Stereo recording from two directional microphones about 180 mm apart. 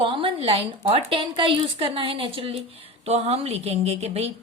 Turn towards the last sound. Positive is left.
turn(degrees=-35)  # may be behind; listen again after turning